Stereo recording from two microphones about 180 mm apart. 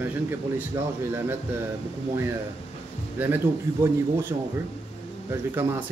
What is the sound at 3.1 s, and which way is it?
Speech, 10° right (ahead or behind).